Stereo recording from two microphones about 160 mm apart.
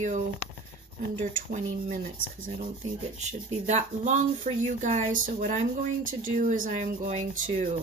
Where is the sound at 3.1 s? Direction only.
45° right (ahead or behind).